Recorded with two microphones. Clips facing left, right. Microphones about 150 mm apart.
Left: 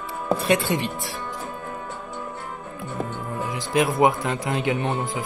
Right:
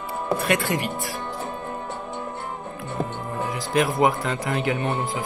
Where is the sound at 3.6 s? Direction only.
20° left (ahead or behind).